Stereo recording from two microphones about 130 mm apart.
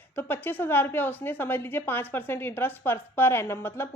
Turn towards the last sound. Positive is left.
turn(degrees=15)  # may be behind; listen again after turning